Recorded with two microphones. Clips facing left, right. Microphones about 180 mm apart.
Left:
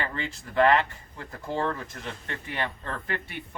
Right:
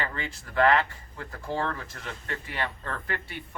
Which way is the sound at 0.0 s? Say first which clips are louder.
Left 1 dB; 20° left (ahead or behind).